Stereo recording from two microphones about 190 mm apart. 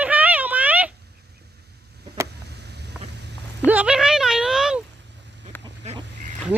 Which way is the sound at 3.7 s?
5° right (ahead or behind).